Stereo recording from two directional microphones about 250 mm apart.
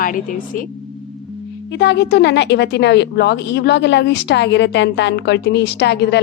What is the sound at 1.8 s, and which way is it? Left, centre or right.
A woman's voice, left.